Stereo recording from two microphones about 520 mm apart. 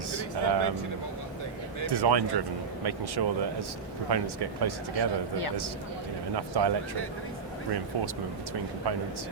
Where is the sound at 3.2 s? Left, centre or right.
Right.